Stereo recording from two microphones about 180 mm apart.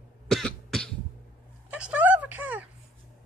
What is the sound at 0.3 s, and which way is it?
Cough, 5° left (ahead or behind).